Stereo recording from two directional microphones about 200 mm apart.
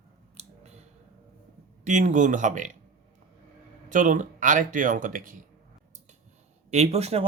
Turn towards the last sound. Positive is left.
turn(degrees=-30)  # may be behind; listen again after turning